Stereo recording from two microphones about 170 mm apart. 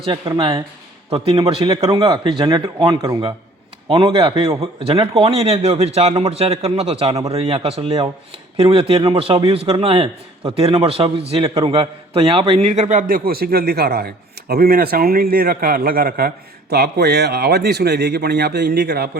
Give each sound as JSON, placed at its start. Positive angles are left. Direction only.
{"t": 0.0, "sound": "a man's voice", "side_deg": -30}